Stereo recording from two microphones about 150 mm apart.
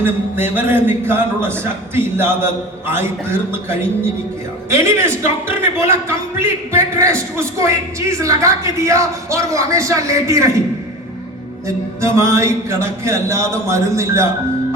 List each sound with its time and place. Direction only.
0.0 s a man's voice: 15° right (ahead or behind)
11.9 s a woman's voice: 20° right (ahead or behind)